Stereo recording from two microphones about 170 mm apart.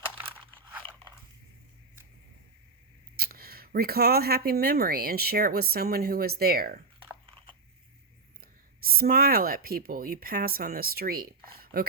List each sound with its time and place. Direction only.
3.2 s speech: 65° right (ahead or behind)
7.0 s biting: 30° right (ahead or behind)
8.4 s speech: 60° right (ahead or behind)